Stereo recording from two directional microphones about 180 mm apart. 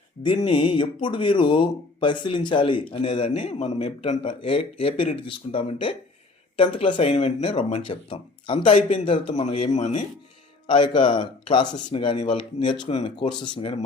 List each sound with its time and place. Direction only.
0.2 s speech: 25° left (ahead or behind)
4.4 s speech: 30° left (ahead or behind)
10.7 s speech: 25° left (ahead or behind)